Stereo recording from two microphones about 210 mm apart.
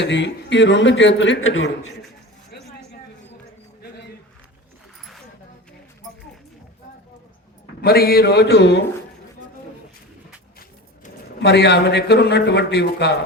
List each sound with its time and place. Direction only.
0.0 s a man's voice: 55° left (ahead or behind); by 1.7 s 75° left (ahead or behind)
7.8 s speech: 50° left (ahead or behind)
10.6 s a man's voice: 50° left (ahead or behind)